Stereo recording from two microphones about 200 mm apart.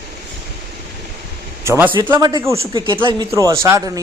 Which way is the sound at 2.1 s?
20° right (ahead or behind).